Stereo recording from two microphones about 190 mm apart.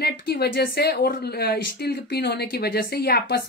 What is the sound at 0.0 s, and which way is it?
Speech, 55° left (ahead or behind).